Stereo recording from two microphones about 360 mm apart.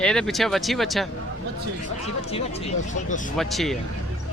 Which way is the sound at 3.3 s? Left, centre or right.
Centre.